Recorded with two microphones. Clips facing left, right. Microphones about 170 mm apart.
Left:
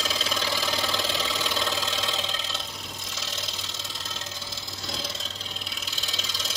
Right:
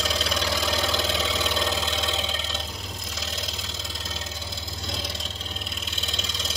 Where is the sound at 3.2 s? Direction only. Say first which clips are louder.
Right 3 dB; centre (ahead or behind).